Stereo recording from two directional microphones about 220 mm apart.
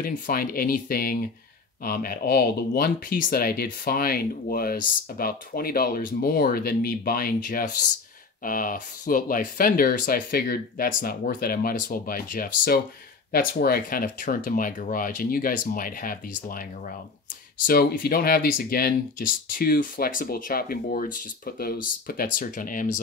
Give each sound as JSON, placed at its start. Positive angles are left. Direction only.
{"t": 0.0, "sound": "speech", "side_deg": 40}
{"t": 17.6, "sound": "speech", "side_deg": 40}